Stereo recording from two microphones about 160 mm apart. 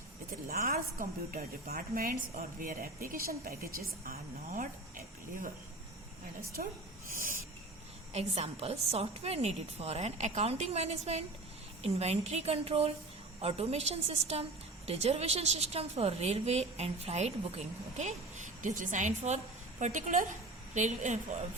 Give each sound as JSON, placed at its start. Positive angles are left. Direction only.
{"t": 0.4, "sound": "a woman's voice", "side_deg": -65}
{"t": 4.0, "sound": "a sound", "side_deg": -60}
{"t": 6.6, "sound": "a woman's voice", "side_deg": -55}
{"t": 7.1, "sound": "cricket", "side_deg": -60}
{"t": 8.1, "sound": "a woman's voice", "side_deg": -45}